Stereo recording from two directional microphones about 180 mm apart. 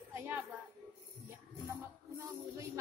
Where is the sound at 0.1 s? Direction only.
15° right (ahead or behind).